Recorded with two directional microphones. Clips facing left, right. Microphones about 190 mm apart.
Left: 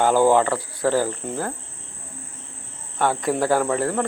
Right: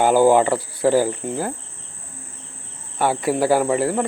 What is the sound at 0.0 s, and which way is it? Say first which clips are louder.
Speech: right 2 dB; 10° right (ahead or behind).